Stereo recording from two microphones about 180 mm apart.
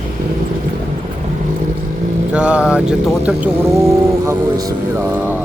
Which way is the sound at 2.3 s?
5° right (ahead or behind).